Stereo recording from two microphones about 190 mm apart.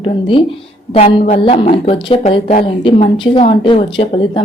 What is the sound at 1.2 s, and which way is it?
A woman's voice, 40° left (ahead or behind).